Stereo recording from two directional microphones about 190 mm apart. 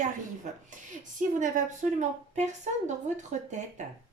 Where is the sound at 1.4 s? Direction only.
40° right (ahead or behind).